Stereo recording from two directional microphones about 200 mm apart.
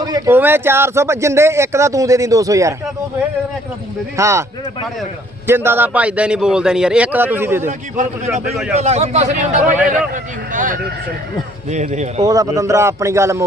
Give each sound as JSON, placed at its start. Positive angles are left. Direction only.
{"t": 0.0, "sound": "speech", "side_deg": -15}
{"t": 4.2, "sound": "speech", "side_deg": -15}
{"t": 5.5, "sound": "speech", "side_deg": -10}
{"t": 7.7, "sound": "a man's voice", "side_deg": -35}
{"t": 9.7, "sound": "a man's voice", "side_deg": -5}
{"t": 10.5, "sound": "a man's voice", "side_deg": -40}
{"t": 12.2, "sound": "speech", "side_deg": -15}